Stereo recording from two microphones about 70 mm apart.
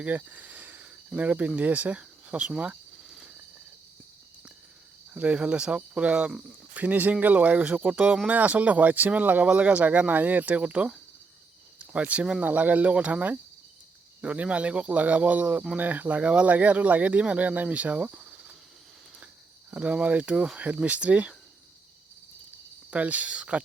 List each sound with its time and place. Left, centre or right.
0.0 s speech: right
3.0 s a sound: centre
5.1 s speech: centre
19.7 s speech: right
22.9 s speech: right